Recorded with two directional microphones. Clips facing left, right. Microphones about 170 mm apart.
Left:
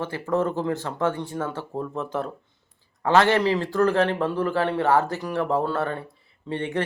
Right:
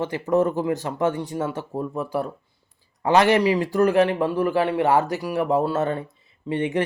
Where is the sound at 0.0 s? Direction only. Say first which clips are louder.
Right 4 dB; 15° right (ahead or behind).